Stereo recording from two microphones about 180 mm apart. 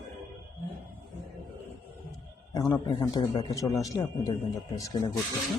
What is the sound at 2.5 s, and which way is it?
A man's voice, 20° left (ahead or behind).